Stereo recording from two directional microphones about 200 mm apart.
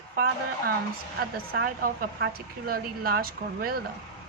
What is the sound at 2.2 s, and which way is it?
Speech, 50° right (ahead or behind).